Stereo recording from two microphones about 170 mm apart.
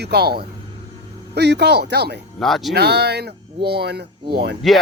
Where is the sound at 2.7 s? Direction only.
75° right (ahead or behind).